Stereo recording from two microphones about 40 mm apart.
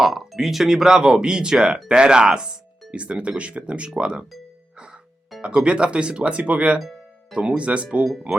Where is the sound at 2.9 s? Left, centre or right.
Right.